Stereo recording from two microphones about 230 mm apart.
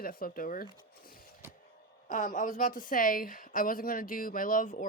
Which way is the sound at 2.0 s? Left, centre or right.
Left.